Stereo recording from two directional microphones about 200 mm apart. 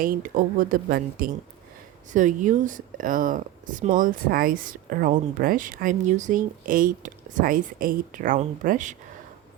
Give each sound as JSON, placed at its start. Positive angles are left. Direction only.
{"t": 0.0, "sound": "speech", "side_deg": -45}